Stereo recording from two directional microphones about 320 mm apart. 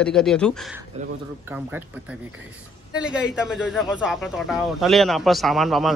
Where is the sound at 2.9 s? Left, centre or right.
Centre.